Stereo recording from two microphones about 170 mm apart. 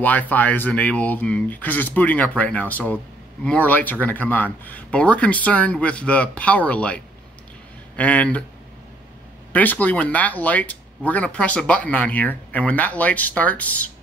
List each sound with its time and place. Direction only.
0.0 s speech: 10° left (ahead or behind)
9.5 s speech: 10° left (ahead or behind)